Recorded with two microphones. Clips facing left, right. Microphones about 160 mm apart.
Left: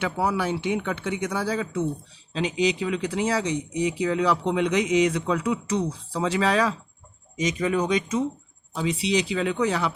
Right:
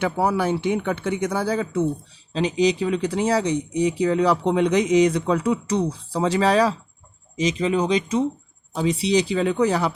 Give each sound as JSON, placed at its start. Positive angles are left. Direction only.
{"t": 0.0, "sound": "speech", "side_deg": -40}